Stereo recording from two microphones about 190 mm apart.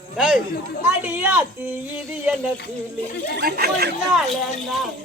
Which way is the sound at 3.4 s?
50° right (ahead or behind).